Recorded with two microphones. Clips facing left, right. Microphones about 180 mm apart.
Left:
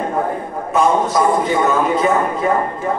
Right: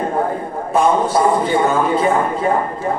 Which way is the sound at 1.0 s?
30° right (ahead or behind).